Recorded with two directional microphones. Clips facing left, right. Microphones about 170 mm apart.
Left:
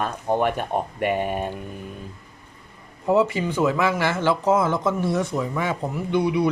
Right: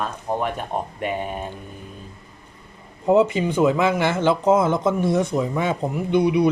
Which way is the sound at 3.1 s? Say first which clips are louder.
Right 3 dB; 20° right (ahead or behind).